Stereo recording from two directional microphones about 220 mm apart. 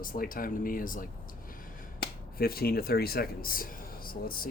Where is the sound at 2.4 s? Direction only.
45° left (ahead or behind).